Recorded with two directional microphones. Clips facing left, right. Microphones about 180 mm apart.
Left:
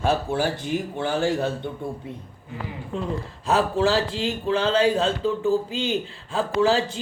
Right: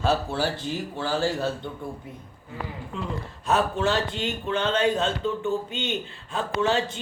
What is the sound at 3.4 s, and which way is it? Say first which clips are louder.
Speech: left 3 dB; 30° left (ahead or behind).